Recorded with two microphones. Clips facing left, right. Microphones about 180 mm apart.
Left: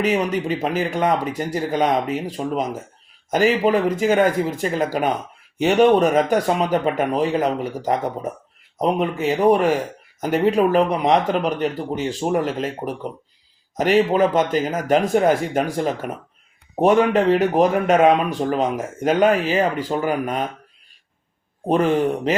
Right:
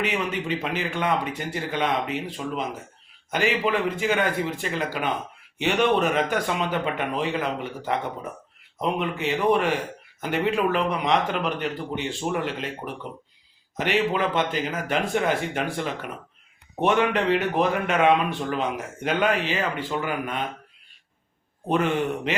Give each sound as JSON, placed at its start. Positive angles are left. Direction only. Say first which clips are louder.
{"t": 0.0, "sound": "a man's voice", "louder": "left 7 dB", "side_deg": 40}
{"t": 21.7, "sound": "speech", "louder": "left 5 dB", "side_deg": 35}